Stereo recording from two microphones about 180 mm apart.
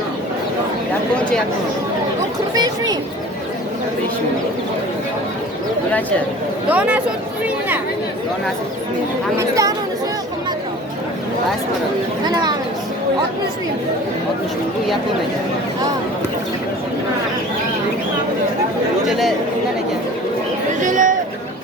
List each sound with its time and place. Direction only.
2.6 s speech: 20° right (ahead or behind)
6.7 s speech: 10° right (ahead or behind)
9.4 s speech: 15° right (ahead or behind)
12.3 s speech: 25° right (ahead or behind)
19.0 s speech: centre (ahead or behind)
20.8 s speech: 45° right (ahead or behind)